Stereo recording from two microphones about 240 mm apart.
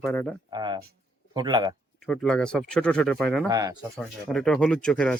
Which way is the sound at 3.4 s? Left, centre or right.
Centre.